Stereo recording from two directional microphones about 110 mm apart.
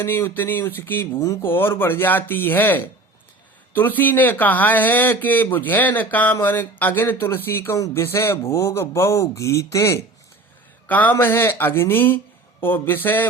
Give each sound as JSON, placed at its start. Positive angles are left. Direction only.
{"t": 0.0, "sound": "speech", "side_deg": 20}
{"t": 10.8, "sound": "speech", "side_deg": 15}